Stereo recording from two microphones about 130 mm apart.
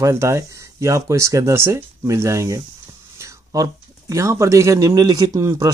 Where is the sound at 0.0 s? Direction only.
20° right (ahead or behind).